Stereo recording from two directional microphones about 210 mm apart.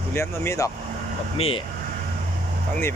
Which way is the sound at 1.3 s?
25° left (ahead or behind).